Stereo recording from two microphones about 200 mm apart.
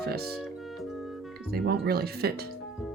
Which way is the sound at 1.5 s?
50° right (ahead or behind).